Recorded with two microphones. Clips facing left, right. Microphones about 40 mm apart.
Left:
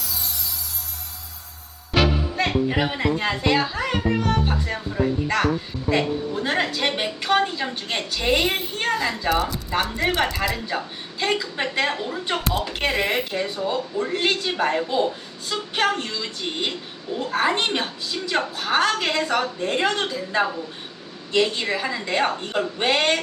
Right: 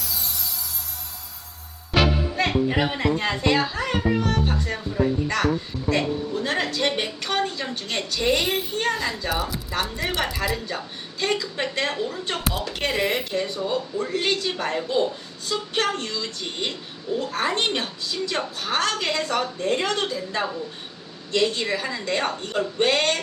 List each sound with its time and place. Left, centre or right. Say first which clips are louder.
1.9 s a woman's voice: even; centre
9.3 s speech: left 4 dB; centre
10.7 s a woman's voice: left 3 dB; centre